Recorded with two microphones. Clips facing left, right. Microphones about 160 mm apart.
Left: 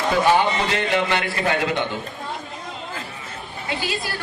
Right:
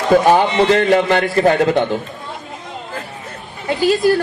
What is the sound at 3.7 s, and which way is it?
Speech, 45° right (ahead or behind).